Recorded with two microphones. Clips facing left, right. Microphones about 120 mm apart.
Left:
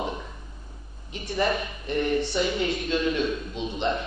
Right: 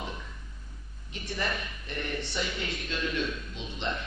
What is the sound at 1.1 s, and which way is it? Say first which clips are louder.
A man's voice: left 8 dB; 15° left (ahead or behind).